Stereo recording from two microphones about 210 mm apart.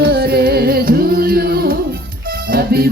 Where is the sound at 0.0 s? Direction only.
50° right (ahead or behind).